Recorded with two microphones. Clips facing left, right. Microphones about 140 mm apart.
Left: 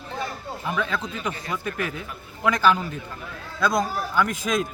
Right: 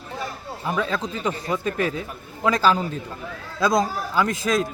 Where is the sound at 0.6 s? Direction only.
30° right (ahead or behind).